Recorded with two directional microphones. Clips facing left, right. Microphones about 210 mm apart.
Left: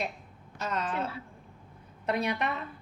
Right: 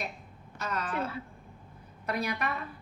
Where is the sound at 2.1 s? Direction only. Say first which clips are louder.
Left 3 dB; 25° left (ahead or behind).